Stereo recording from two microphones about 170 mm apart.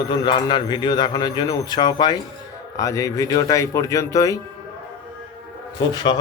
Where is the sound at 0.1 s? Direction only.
25° left (ahead or behind).